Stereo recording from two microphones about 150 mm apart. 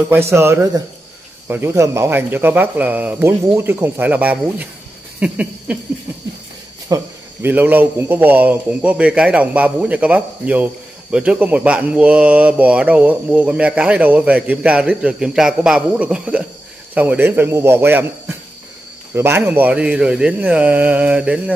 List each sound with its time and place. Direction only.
0.1 s a man's voice: 15° right (ahead or behind)
6.9 s speech: 25° right (ahead or behind)
7.4 s a man's voice: 10° right (ahead or behind)
19.1 s a man's voice: 15° right (ahead or behind)